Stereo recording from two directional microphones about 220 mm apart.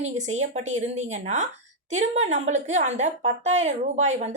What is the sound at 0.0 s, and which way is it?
Speech, 30° right (ahead or behind).